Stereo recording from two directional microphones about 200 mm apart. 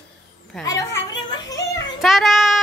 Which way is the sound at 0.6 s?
15° left (ahead or behind).